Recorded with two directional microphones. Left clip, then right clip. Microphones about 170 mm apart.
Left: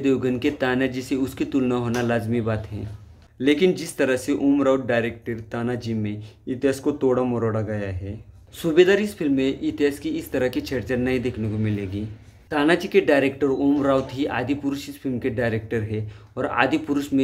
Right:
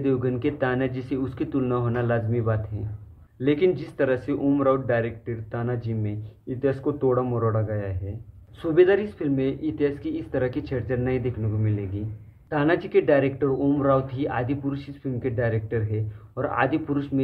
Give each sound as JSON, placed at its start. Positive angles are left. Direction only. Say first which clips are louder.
{"t": 0.0, "sound": "speech", "louder": "left 3 dB", "side_deg": 10}